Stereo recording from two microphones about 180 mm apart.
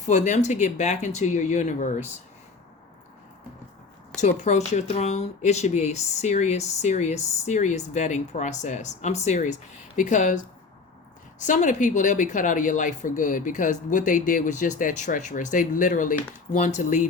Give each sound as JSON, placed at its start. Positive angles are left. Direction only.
{"t": 0.0, "sound": "speech", "side_deg": 40}
{"t": 4.2, "sound": "speech", "side_deg": 40}